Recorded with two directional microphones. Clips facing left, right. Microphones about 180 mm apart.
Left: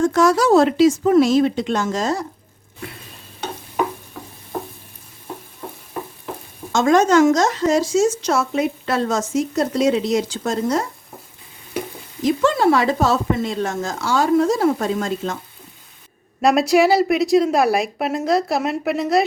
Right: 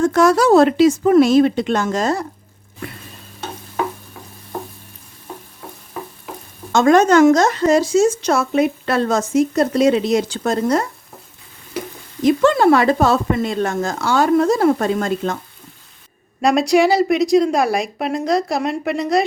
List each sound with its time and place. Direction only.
0.1 s speech: 60° right (ahead or behind)
6.7 s speech: 60° right (ahead or behind)
12.2 s speech: 60° right (ahead or behind)
16.4 s a woman's voice: centre (ahead or behind)